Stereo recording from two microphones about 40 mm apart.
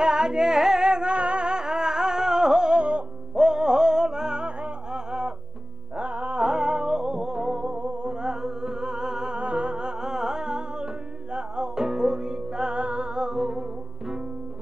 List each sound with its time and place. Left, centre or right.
0.0 s music: centre
5.9 s music: right
9.4 s music: right